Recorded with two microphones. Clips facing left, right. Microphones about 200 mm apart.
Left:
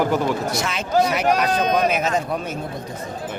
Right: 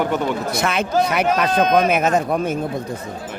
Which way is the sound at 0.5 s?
55° right (ahead or behind).